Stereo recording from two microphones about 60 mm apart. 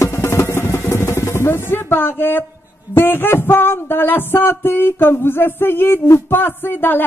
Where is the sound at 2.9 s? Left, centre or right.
Left.